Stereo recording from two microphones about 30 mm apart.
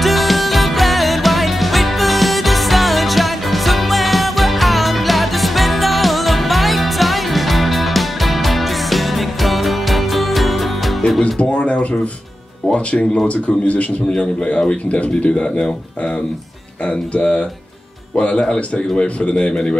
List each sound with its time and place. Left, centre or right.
0.0 s music: centre
11.3 s a sound: left
12.7 s speech: left
13.3 s speech: left
14.9 s speech: left
16.8 s speech: left
18.5 s speech: left